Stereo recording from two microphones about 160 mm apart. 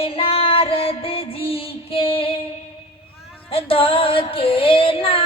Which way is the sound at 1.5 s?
35° left (ahead or behind).